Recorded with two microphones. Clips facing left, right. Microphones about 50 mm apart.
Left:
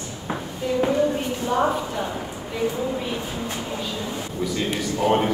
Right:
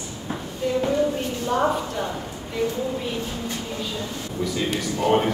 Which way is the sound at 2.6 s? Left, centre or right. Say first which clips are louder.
Left 1 dB; centre.